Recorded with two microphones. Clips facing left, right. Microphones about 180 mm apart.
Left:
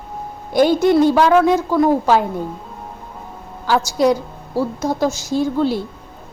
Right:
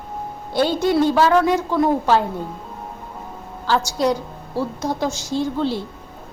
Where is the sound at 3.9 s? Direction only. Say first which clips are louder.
Left 4 dB; 10° left (ahead or behind).